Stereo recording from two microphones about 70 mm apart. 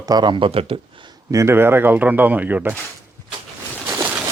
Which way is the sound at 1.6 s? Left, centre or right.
Right.